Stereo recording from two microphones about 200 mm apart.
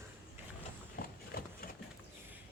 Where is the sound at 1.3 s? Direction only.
50° left (ahead or behind).